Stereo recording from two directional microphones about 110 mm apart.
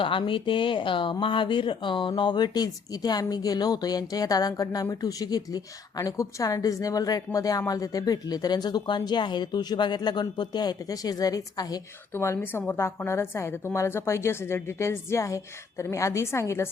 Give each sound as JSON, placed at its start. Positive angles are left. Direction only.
{"t": 0.0, "sound": "a woman's voice", "side_deg": 50}
{"t": 12.1, "sound": "a woman's voice", "side_deg": 25}